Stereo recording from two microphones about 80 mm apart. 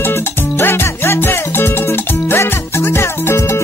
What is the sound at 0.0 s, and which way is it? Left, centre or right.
Music, left.